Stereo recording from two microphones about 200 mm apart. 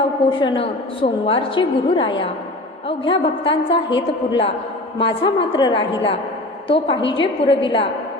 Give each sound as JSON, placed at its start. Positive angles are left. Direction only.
{"t": 0.3, "sound": "a woman's voice", "side_deg": 25}